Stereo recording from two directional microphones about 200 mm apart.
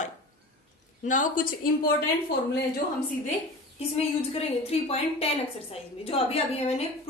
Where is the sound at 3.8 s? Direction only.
30° left (ahead or behind).